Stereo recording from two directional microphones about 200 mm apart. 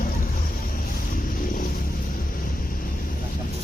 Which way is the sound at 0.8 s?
45° left (ahead or behind).